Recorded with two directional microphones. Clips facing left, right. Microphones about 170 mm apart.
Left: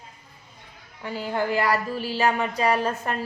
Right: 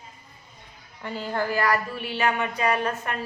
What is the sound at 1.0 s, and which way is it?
Speech, 10° left (ahead or behind).